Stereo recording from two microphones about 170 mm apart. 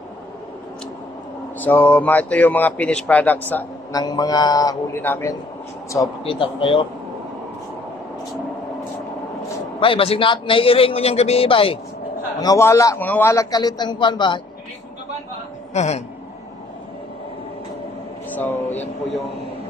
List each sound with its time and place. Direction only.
1.6 s speech: 10° left (ahead or behind)
3.9 s a man's voice: 25° left (ahead or behind)
6.2 s a man's voice: 30° left (ahead or behind)
9.8 s a man's voice: 30° left (ahead or behind)
12.4 s a man's voice: 20° left (ahead or behind)
15.7 s a sound: 40° left (ahead or behind)
18.3 s a sound: 10° left (ahead or behind)